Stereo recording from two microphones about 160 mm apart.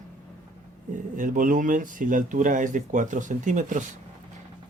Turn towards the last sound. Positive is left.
turn(degrees=-50)  # may be behind; listen again after turning